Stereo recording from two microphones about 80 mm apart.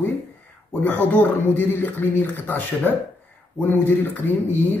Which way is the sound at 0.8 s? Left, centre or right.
Centre.